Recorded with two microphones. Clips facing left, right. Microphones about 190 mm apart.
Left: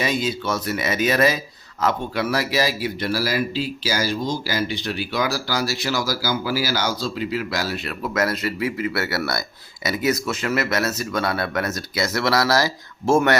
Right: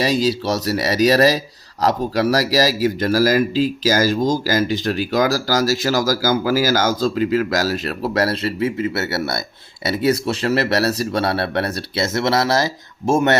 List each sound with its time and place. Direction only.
0.0 s speech: 35° right (ahead or behind)